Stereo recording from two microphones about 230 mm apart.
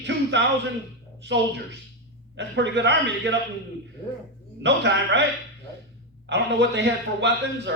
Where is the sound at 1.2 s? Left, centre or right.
Right.